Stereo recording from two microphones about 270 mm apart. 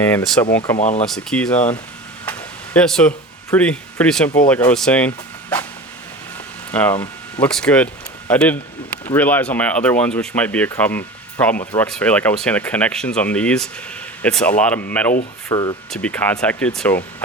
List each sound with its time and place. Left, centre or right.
0.0 s speech: centre
0.8 s speech: left
1.0 s speech: centre
2.2 s a sound: centre
3.5 s speech: centre
6.7 s speech: centre
11.5 s speech: left
11.8 s speech: centre